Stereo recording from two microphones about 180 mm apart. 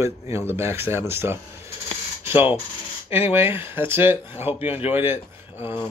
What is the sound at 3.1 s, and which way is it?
Speech, 10° right (ahead or behind).